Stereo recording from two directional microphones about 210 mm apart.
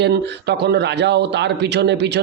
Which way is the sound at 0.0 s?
50° right (ahead or behind).